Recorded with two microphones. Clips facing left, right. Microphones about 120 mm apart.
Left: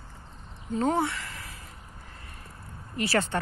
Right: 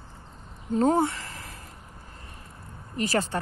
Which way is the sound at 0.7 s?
40° right (ahead or behind).